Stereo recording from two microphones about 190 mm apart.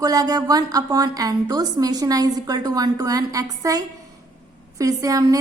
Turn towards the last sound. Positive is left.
turn(degrees=-20)  # may be behind; listen again after turning